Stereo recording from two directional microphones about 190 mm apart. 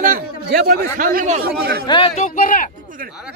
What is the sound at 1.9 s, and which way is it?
Speech, 30° left (ahead or behind).